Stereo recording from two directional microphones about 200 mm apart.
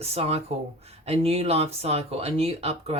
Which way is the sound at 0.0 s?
30° right (ahead or behind).